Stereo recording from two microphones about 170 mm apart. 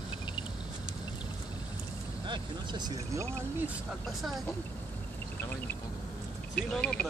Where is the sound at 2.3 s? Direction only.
25° right (ahead or behind).